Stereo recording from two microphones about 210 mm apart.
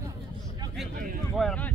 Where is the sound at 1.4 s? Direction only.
5° left (ahead or behind).